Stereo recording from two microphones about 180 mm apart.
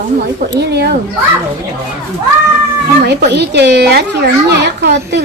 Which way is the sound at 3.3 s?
70° right (ahead or behind).